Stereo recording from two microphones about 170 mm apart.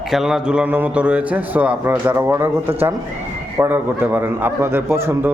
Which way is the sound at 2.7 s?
35° right (ahead or behind).